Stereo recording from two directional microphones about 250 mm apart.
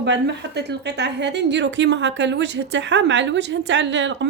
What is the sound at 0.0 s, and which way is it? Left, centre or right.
A woman's voice, right.